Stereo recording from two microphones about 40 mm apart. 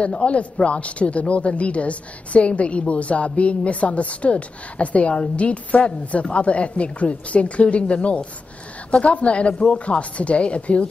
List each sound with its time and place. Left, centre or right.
0.0 s a man's voice: left